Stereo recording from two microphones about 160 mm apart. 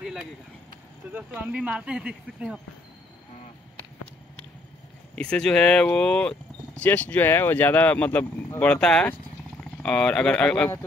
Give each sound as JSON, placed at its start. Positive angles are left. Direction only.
{"t": 0.0, "sound": "a sound", "side_deg": -5}
{"t": 1.1, "sound": "speech", "side_deg": -10}
{"t": 5.1, "sound": "speech", "side_deg": 5}